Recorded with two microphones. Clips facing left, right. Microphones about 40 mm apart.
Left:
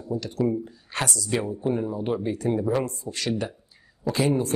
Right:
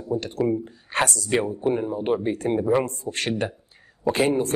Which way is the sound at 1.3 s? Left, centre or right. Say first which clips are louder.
Right 1 dB; right.